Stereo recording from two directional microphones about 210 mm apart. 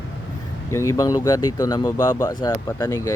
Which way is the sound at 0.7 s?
15° left (ahead or behind).